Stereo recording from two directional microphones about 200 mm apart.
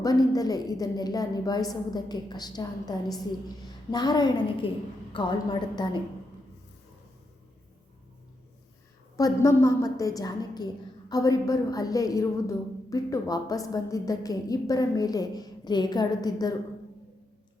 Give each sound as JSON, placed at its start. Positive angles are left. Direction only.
{"t": 0.0, "sound": "a woman's voice", "side_deg": 20}
{"t": 9.1, "sound": "a woman's voice", "side_deg": 15}